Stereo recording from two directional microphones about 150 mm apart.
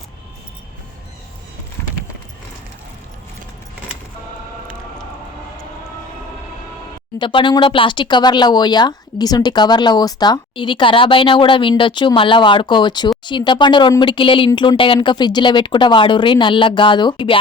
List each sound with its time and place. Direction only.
7.2 s speech: 30° left (ahead or behind)